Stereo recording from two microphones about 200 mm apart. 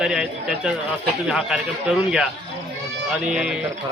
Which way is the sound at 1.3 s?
Centre (ahead or behind).